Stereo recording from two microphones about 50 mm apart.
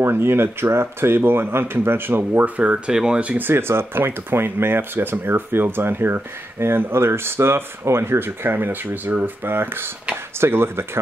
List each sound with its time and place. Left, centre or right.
0.0 s speech: right
2.5 s speech: right
2.9 s speech: centre
3.3 s speech: right